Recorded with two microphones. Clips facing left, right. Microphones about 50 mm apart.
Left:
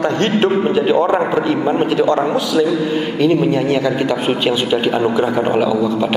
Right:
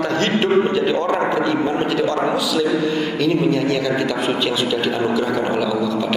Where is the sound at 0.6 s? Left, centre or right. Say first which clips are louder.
Left 4 dB; centre.